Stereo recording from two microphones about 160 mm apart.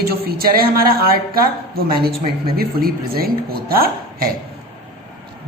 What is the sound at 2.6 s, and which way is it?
A woman's voice, 70° right (ahead or behind).